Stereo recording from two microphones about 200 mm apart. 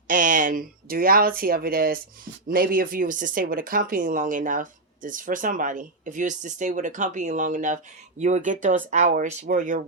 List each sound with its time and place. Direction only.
0.1 s speech: 40° right (ahead or behind)